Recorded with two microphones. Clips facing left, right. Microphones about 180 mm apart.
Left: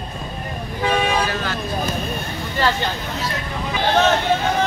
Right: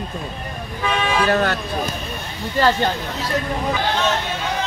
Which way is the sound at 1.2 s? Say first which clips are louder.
Right 6 dB; 60° right (ahead or behind).